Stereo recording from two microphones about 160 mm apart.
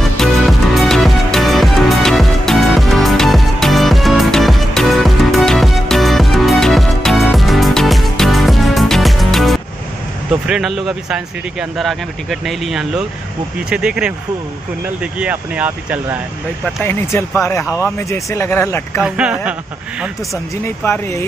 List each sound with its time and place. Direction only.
0.2 s music: centre (ahead or behind)
10.4 s speech: 5° right (ahead or behind)
15.1 s speech: 10° right (ahead or behind)
16.6 s speech: 10° left (ahead or behind)
18.9 s speech: 5° right (ahead or behind)
20.6 s speech: 15° left (ahead or behind)